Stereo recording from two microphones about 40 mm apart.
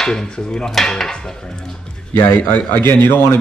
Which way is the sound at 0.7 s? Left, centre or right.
Centre.